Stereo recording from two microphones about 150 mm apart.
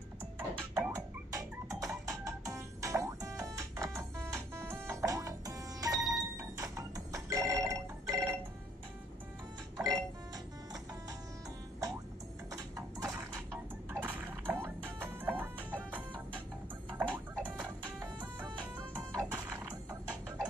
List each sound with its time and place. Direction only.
0.7 s music: 20° right (ahead or behind)
9.8 s music: 25° right (ahead or behind)
12.4 s a sound: 25° right (ahead or behind)
16.9 s music: 10° right (ahead or behind)